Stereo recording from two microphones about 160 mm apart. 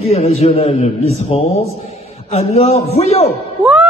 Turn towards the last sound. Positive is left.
turn(degrees=-5)  # may be behind; listen again after turning